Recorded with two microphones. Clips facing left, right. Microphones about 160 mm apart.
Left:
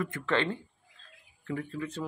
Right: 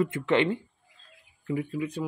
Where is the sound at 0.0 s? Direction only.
20° right (ahead or behind).